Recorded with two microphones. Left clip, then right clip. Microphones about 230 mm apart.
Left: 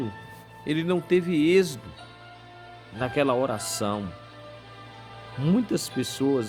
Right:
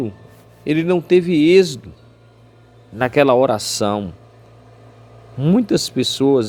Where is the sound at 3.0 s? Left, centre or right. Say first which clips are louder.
Right 11 dB; centre.